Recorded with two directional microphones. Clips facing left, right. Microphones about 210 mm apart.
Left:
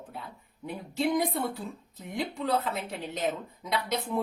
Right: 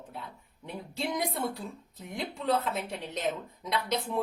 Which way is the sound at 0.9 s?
Centre (ahead or behind).